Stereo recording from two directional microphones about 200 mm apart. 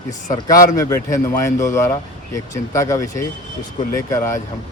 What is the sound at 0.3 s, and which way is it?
A man's voice, 20° left (ahead or behind).